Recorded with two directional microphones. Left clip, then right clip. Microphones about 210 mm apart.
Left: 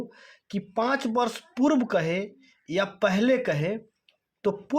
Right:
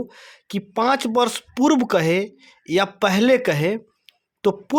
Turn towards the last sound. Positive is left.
turn(degrees=-35)  # may be behind; listen again after turning